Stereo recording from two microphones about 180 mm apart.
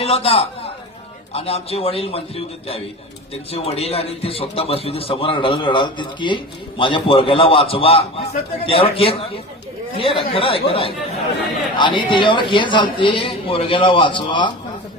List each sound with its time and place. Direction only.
0.0 s a man's voice: 30° left (ahead or behind)